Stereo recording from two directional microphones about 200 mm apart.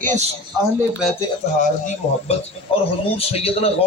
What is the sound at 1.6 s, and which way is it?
Speech, 40° left (ahead or behind).